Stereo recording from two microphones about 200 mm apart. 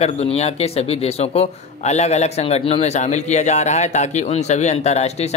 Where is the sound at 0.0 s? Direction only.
30° left (ahead or behind).